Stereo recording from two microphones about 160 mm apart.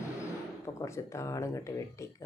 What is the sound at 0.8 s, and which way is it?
Speech, 20° left (ahead or behind).